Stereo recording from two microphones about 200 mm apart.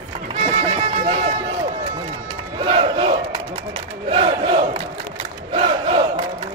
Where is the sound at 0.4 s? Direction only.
30° right (ahead or behind).